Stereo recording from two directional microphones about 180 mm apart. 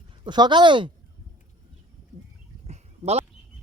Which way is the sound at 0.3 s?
25° right (ahead or behind).